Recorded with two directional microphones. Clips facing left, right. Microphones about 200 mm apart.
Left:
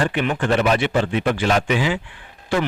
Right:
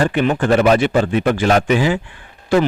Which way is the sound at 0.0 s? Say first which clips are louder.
Right 5 dB; 40° right (ahead or behind).